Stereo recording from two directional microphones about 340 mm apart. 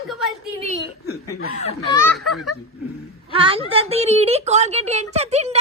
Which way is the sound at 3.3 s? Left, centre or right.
Centre.